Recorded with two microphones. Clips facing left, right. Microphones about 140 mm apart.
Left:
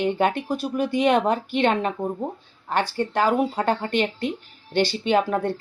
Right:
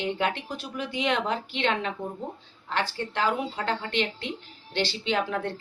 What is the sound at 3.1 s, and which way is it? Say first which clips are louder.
Speech: left 6 dB; 45° left (ahead or behind).